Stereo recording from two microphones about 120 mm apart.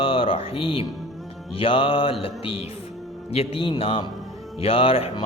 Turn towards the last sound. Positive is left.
turn(degrees=50)  # may be behind; listen again after turning